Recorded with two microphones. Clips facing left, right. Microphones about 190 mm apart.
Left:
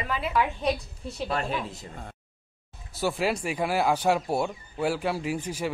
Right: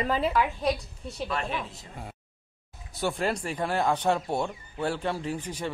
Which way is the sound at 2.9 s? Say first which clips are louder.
Left 2 dB; 5° left (ahead or behind).